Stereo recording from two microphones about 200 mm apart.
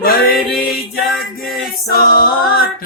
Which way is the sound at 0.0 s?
45° left (ahead or behind).